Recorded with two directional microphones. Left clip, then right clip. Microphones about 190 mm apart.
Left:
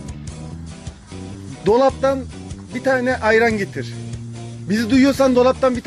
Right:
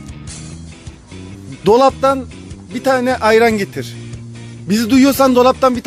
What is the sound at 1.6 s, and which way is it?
Speech, 25° right (ahead or behind).